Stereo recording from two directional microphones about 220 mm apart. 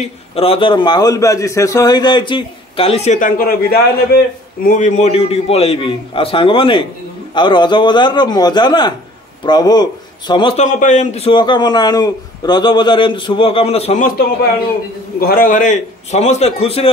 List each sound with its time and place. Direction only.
0.4 s a man's voice: 25° left (ahead or behind); by 4.2 s 45° left (ahead or behind)
4.6 s a man's voice: 35° left (ahead or behind)